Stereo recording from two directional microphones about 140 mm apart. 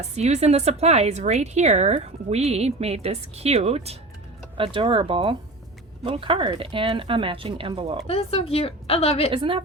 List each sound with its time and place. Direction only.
0.1 s speech: 50° right (ahead or behind)
8.0 s a woman's voice: 45° left (ahead or behind)
9.3 s speech: 40° right (ahead or behind)